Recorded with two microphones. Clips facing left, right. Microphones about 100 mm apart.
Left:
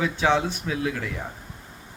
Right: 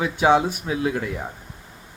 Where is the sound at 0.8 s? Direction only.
25° right (ahead or behind).